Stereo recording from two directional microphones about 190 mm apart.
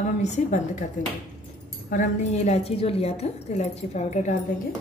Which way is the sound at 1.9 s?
40° left (ahead or behind).